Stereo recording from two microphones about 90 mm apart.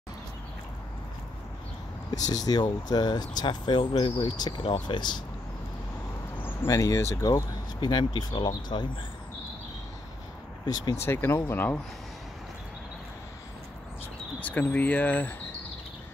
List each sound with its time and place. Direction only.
2.0 s speech: 45° left (ahead or behind); by 4.3 s 70° left (ahead or behind)
4.4 s speech: 50° left (ahead or behind)
6.3 s a sound: 25° left (ahead or behind)
6.7 s speech: 35° left (ahead or behind); by 8.8 s 55° left (ahead or behind)
11.0 s speech: 25° left (ahead or behind)
14.4 s speech: 15° left (ahead or behind)